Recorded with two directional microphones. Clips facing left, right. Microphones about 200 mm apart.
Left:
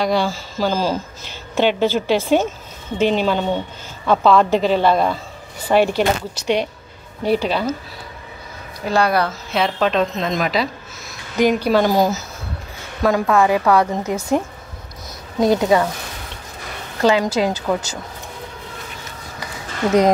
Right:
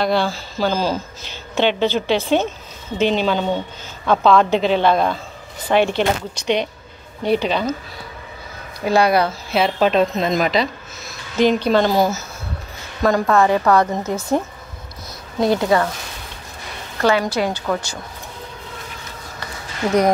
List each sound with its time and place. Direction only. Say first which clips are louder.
0.0 s a woman's voice: even; 10° left (ahead or behind)
8.8 s a woman's voice: right 2 dB; 10° right (ahead or behind); by 15.9 s 15° left (ahead or behind)
17.0 s a woman's voice: left 1 dB; 15° left (ahead or behind)
17.5 s a woman's voice: left 2 dB; 5° left (ahead or behind)